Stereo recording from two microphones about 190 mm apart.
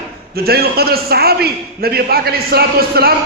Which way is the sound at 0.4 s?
55° right (ahead or behind).